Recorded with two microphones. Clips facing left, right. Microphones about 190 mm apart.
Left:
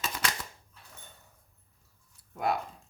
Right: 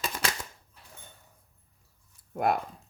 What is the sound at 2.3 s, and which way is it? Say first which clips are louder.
Speech: right 3 dB; 50° right (ahead or behind).